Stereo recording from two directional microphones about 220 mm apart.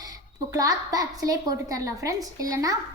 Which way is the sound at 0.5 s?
15° right (ahead or behind).